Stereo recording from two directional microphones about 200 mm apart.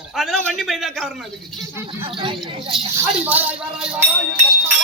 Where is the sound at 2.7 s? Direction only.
Centre (ahead or behind).